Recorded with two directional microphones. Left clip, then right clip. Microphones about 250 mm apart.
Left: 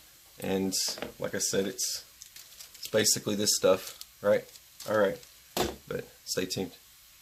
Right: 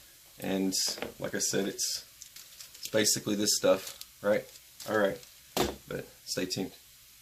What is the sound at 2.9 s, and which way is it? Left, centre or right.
Speech, left.